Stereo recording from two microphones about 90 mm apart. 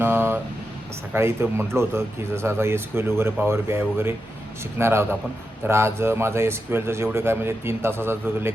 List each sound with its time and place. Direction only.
0.0 s vehicle: 25° right (ahead or behind)
1.1 s speech: 25° right (ahead or behind)